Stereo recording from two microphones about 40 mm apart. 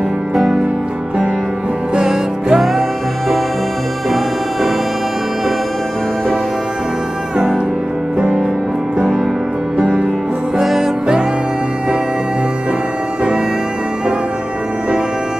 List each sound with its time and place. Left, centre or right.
2.0 s music: centre
9.8 s music: right